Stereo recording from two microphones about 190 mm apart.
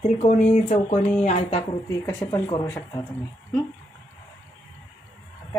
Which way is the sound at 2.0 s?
20° left (ahead or behind).